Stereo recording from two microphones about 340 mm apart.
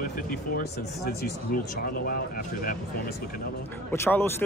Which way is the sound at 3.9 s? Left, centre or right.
Centre.